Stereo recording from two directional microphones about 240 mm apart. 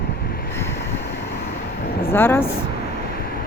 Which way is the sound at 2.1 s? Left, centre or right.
Centre.